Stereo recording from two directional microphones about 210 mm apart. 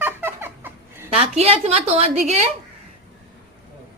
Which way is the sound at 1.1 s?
30° right (ahead or behind).